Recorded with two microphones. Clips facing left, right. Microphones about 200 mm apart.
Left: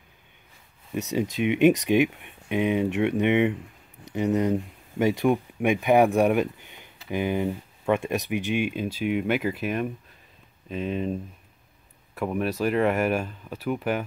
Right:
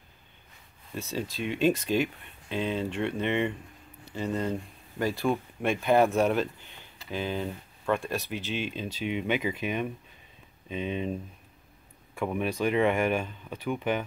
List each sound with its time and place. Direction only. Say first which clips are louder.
1.1 s speech: left 8 dB; 20° left (ahead or behind); by 11.1 s centre (ahead or behind)
12.2 s speech: left 2 dB; 5° left (ahead or behind)